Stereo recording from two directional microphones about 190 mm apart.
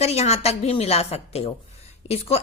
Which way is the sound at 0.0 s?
35° left (ahead or behind).